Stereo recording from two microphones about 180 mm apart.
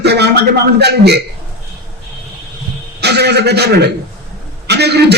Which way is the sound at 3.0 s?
65° right (ahead or behind).